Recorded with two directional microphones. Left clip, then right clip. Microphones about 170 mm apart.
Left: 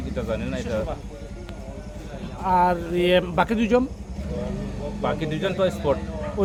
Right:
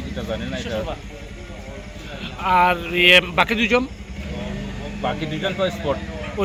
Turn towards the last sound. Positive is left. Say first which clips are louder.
# even
turn(degrees=25)  # may be behind; listen again after turning